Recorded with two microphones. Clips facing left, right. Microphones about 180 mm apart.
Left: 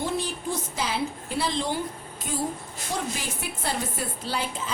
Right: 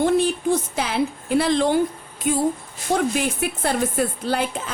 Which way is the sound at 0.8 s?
65° right (ahead or behind).